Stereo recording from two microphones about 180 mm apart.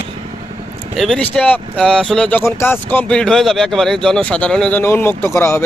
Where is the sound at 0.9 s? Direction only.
Centre (ahead or behind).